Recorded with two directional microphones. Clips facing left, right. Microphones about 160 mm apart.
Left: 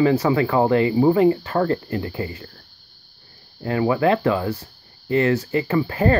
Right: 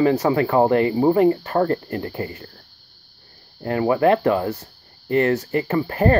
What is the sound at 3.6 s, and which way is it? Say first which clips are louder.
Speech: right 1 dB; 40° right (ahead or behind).